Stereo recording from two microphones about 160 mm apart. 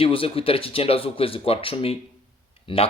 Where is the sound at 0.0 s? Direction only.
35° left (ahead or behind).